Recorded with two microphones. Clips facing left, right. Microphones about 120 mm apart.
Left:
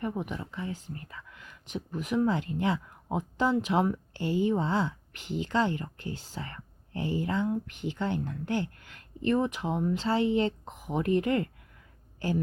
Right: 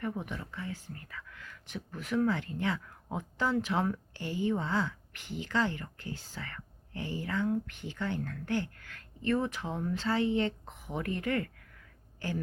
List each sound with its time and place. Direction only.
0.0 s speech: 20° left (ahead or behind)